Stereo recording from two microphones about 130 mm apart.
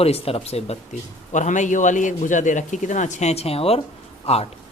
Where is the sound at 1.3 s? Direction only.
70° left (ahead or behind).